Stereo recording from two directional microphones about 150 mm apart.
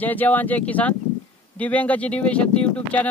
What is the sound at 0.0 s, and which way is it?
Speech, 10° left (ahead or behind).